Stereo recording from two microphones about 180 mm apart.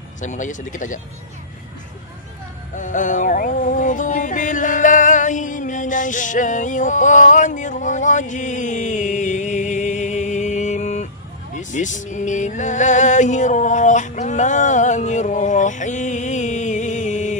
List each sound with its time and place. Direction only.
0.2 s speech: 45° left (ahead or behind)
2.7 s music: 45° left (ahead or behind)
11.5 s a sound: 45° left (ahead or behind)